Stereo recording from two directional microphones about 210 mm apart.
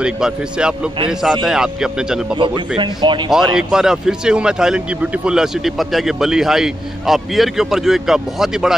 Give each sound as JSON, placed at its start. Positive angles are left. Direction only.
{"t": 0.0, "sound": "speech", "side_deg": -5}
{"t": 2.3, "sound": "speech", "side_deg": -25}
{"t": 3.3, "sound": "speech", "side_deg": 0}